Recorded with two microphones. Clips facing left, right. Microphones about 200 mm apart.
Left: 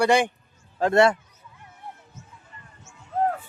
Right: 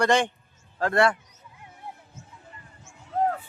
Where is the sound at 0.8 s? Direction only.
25° left (ahead or behind).